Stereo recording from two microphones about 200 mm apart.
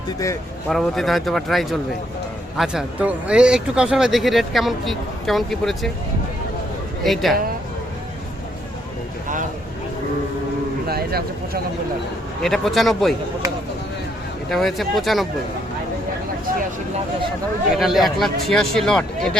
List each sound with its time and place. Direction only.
0.7 s speech: centre (ahead or behind)
7.0 s speech: centre (ahead or behind)
10.8 s speech: 50° right (ahead or behind)
12.4 s speech: centre (ahead or behind)
14.5 s speech: centre (ahead or behind)
17.7 s speech: centre (ahead or behind)